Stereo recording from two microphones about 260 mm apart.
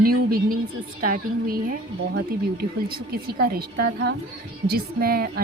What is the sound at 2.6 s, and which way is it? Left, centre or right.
A woman's voice, right.